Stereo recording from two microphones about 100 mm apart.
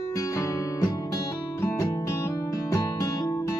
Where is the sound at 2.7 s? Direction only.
35° left (ahead or behind).